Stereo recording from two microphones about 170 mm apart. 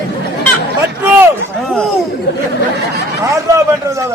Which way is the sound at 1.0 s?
10° right (ahead or behind).